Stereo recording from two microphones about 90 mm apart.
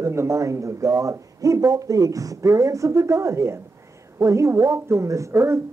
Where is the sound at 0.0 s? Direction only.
35° right (ahead or behind).